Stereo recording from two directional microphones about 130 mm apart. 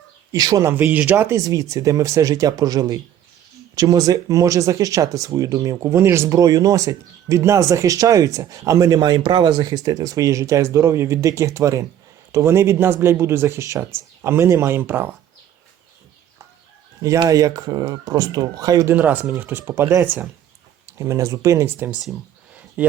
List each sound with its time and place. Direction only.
0.3 s speech: 30° right (ahead or behind)
17.2 s speech: 30° right (ahead or behind)
18.9 s speech: 15° right (ahead or behind)